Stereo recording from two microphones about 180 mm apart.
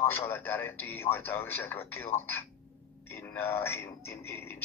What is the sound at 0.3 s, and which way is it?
A man's voice, 10° left (ahead or behind).